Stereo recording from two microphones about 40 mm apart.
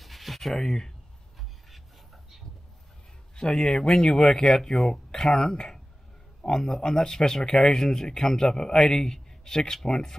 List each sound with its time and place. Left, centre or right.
0.0 s a sound: centre
0.6 s speech: centre
3.3 s speech: centre
5.1 s speech: centre